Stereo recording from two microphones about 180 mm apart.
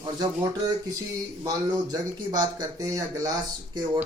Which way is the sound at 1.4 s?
20° right (ahead or behind).